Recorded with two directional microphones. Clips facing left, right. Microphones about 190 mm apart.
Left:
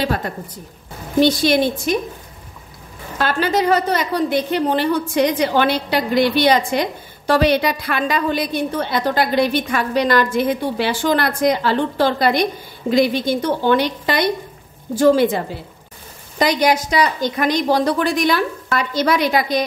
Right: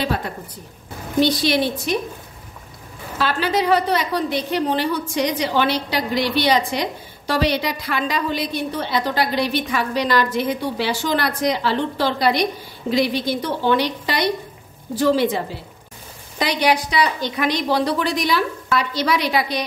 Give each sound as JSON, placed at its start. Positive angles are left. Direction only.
{"t": 0.0, "sound": "a woman's voice", "side_deg": 45}
{"t": 3.2, "sound": "a woman's voice", "side_deg": 45}